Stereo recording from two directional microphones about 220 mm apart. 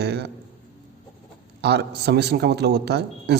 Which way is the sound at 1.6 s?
50° right (ahead or behind).